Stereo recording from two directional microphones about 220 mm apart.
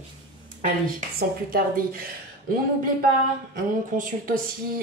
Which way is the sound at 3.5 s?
40° right (ahead or behind).